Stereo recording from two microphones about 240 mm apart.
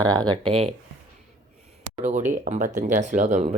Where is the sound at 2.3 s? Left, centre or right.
Right.